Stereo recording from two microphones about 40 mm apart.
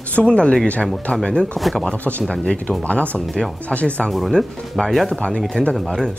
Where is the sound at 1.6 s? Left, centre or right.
Centre.